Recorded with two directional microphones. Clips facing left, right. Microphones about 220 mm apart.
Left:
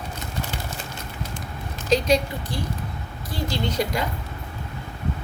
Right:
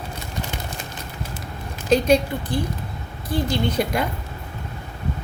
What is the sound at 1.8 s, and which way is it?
A woman's voice, 55° right (ahead or behind).